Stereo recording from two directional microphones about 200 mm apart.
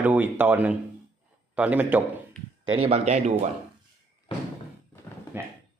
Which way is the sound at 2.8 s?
30° right (ahead or behind).